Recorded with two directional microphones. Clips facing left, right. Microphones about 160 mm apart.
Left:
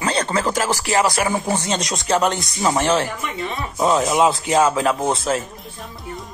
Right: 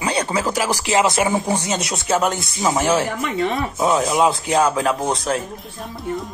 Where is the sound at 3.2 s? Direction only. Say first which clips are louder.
Right 6 dB; 55° right (ahead or behind).